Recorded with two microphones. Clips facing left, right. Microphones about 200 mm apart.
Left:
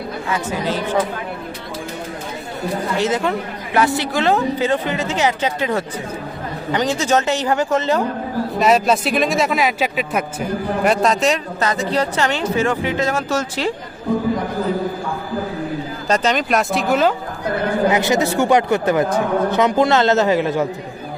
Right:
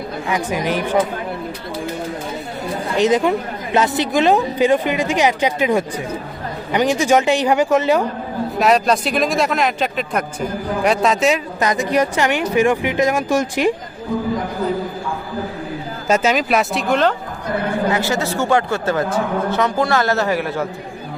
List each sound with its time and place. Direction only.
0.3 s speech: 15° right (ahead or behind)
2.9 s speech: 15° right (ahead or behind)
8.5 s speech: centre (ahead or behind)
11.6 s speech: 15° right (ahead or behind)
16.0 s speech: 10° right (ahead or behind)
17.9 s a man's voice: 20° left (ahead or behind)